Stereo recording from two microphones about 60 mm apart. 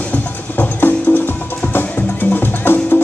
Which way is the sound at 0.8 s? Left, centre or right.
Left.